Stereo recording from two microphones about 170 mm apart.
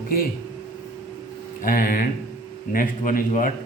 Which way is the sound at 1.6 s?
55° left (ahead or behind).